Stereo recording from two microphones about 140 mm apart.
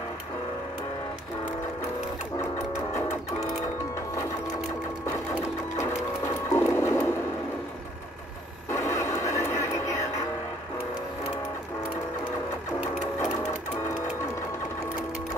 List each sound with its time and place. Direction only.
5.0 s sewing machine: 20° left (ahead or behind)
8.7 s vehicle: 20° left (ahead or behind)
9.2 s a sound: 20° left (ahead or behind)